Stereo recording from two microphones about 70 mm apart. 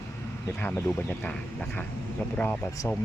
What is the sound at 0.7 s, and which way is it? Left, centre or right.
Speech, centre.